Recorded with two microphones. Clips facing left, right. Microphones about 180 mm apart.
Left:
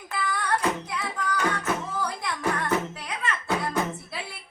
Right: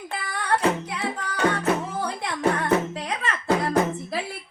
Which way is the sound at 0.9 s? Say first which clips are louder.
Right 1 dB; 30° right (ahead or behind).